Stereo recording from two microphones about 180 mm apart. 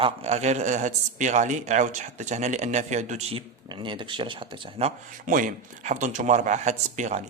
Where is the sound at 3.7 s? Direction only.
25° right (ahead or behind).